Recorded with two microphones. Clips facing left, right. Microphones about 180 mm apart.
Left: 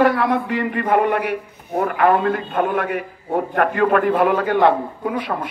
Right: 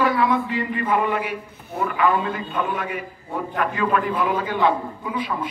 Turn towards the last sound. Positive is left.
turn(degrees=65)  # may be behind; listen again after turning